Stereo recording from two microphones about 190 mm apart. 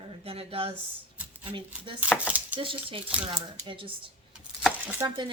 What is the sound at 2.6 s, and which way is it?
Speech, 30° right (ahead or behind).